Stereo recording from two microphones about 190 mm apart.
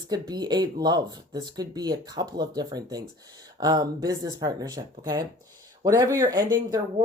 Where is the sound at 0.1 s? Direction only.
20° right (ahead or behind).